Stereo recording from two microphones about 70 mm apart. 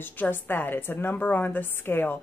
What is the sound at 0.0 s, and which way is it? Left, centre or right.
Speech, left.